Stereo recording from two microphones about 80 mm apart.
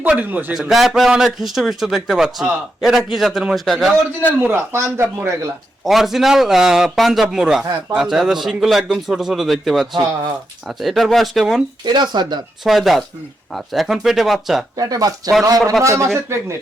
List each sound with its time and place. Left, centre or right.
0.1 s a man's voice: centre
0.5 s a man's voice: centre
4.4 s speech: right
5.8 s a man's voice: centre
11.9 s speech: right
12.6 s a man's voice: centre
14.8 s speech: right